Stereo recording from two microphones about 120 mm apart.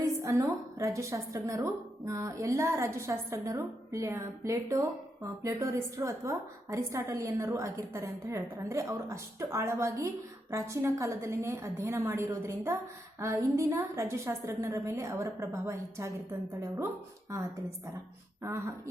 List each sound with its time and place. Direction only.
0.0 s a woman's voice: 25° right (ahead or behind)